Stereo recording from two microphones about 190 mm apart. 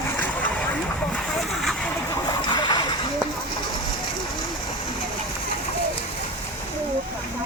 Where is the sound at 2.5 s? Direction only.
25° left (ahead or behind).